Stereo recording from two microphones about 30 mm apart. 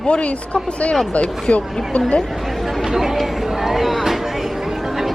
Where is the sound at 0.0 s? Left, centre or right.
Left.